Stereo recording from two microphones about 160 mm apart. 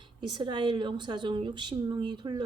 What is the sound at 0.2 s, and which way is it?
A woman's voice, 30° right (ahead or behind).